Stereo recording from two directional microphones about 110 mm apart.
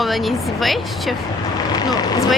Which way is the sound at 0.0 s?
Centre (ahead or behind).